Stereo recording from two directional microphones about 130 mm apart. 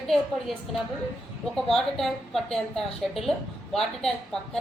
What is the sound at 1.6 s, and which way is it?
A woman's voice, centre (ahead or behind).